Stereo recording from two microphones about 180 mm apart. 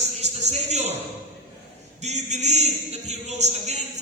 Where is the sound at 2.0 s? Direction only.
40° right (ahead or behind).